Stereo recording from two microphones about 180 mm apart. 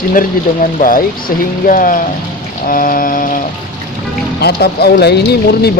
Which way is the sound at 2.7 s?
50° left (ahead or behind).